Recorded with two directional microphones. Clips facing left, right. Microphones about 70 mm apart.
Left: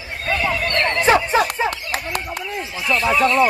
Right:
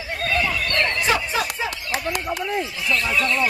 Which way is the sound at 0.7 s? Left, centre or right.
Left.